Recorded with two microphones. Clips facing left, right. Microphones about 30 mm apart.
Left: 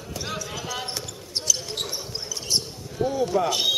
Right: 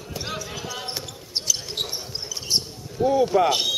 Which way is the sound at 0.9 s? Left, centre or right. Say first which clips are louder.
Right 1 dB; centre.